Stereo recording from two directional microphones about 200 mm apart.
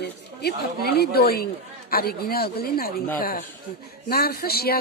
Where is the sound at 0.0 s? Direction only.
50° left (ahead or behind).